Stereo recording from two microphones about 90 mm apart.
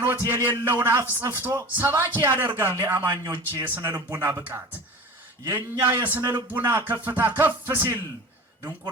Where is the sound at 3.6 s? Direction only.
20° right (ahead or behind).